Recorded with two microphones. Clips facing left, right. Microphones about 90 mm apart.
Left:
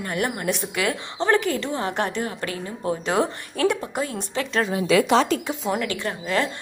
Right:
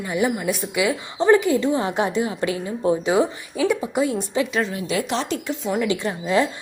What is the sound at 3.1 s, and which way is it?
Speech, 5° right (ahead or behind).